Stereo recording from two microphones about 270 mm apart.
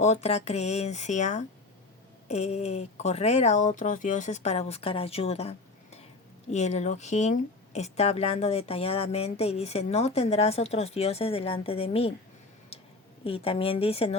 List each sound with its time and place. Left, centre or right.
0.0 s a woman's voice: left
12.7 s a sound: left
13.2 s a woman's voice: left